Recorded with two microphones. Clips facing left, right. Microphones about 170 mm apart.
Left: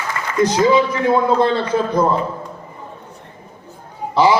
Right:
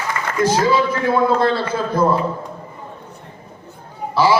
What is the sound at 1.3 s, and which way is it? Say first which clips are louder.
Speech: left 1 dB; 20° left (ahead or behind).